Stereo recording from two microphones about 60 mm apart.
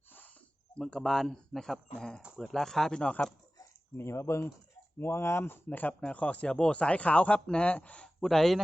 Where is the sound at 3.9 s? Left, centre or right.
Left.